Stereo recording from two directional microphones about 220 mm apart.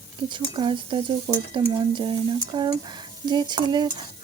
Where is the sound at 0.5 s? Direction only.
20° right (ahead or behind).